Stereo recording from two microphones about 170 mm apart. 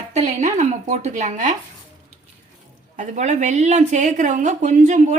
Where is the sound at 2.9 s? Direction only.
45° right (ahead or behind).